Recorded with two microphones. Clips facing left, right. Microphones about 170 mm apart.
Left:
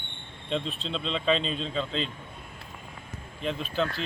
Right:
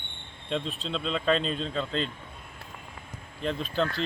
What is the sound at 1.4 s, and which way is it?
Speech, 55° right (ahead or behind).